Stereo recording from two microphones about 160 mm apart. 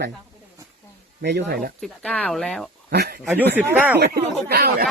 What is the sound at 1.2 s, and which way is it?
Speech, 90° right.